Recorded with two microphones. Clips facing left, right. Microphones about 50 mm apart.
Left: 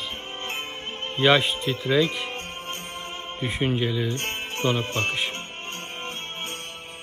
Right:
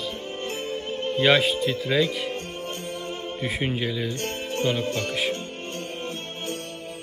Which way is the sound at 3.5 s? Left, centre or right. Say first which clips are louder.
Left 3 dB; centre.